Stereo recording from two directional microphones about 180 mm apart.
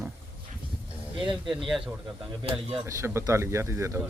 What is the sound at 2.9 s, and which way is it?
Speech, 15° right (ahead or behind).